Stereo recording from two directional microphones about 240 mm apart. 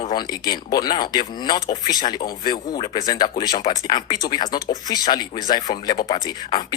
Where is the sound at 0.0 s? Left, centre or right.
Centre.